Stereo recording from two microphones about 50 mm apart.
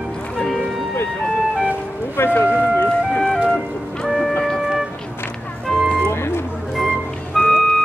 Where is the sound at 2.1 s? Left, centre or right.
Left.